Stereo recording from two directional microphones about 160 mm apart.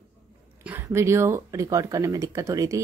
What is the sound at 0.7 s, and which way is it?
Speech, 15° right (ahead or behind).